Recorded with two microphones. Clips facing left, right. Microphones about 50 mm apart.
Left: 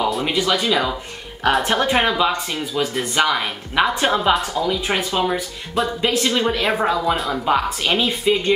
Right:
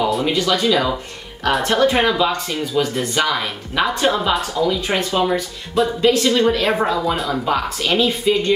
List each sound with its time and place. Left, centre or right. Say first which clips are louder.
0.0 s a sound: right 2 dB; centre
0.3 s speech: right 2 dB; centre
6.0 s speech: right 5 dB; centre
7.4 s speech: left 4 dB; centre